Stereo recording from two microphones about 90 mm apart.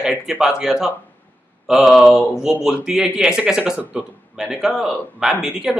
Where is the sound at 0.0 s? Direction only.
5° right (ahead or behind).